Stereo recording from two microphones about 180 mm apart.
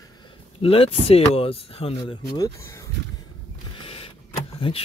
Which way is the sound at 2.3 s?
20° left (ahead or behind).